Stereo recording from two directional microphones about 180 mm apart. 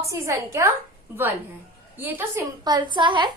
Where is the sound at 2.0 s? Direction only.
10° right (ahead or behind).